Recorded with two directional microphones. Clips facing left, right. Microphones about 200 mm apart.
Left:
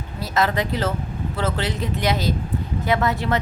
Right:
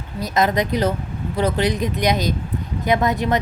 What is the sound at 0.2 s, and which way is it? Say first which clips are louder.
Speech: right 3 dB; 15° right (ahead or behind).